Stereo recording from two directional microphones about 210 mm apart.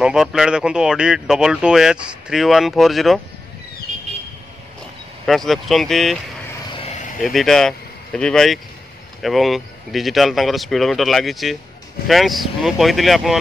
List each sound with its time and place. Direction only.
0.0 s speech: 5° right (ahead or behind)
5.2 s speech: centre (ahead or behind)
6.7 s vehicle: 30° left (ahead or behind)
7.2 s speech: centre (ahead or behind)